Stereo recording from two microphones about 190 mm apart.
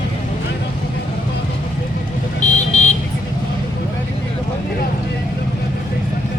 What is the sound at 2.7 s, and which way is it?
Vehicle, 35° left (ahead or behind).